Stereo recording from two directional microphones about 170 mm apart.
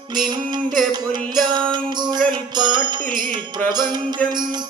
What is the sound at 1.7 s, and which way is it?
Music, 25° right (ahead or behind).